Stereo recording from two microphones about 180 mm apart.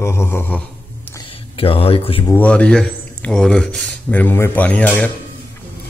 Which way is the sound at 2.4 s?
5° left (ahead or behind).